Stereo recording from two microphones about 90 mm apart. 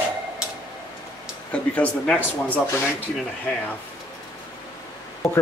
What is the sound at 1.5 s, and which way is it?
Speech, 15° left (ahead or behind).